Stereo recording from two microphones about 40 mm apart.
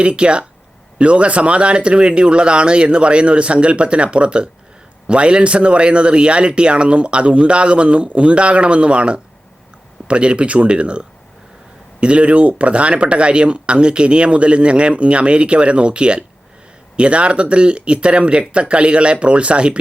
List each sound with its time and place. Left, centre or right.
0.0 s speech: right